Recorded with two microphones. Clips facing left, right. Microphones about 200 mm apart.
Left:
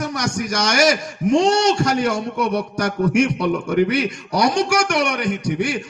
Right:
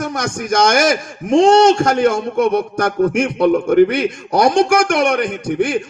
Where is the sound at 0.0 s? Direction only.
50° right (ahead or behind).